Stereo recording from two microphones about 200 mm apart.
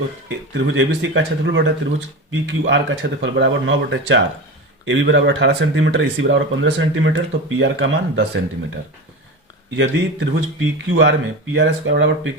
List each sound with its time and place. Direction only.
0.3 s speech: 65° right (ahead or behind)
9.7 s speech: 65° right (ahead or behind)